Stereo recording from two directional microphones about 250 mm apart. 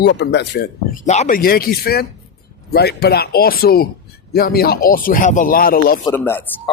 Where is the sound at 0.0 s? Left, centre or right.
Left.